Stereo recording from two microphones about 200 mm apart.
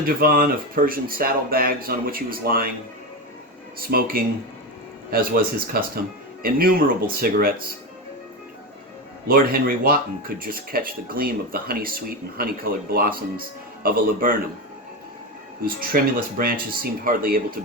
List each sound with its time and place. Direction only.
0.0 s speech: 50° right (ahead or behind)
3.8 s speech: 45° right (ahead or behind)
9.2 s speech: 45° right (ahead or behind)
15.6 s speech: 45° right (ahead or behind)